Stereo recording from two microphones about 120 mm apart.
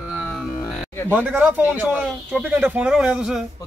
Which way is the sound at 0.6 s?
20° left (ahead or behind).